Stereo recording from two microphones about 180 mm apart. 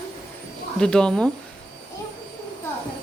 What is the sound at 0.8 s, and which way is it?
Speech, 5° left (ahead or behind).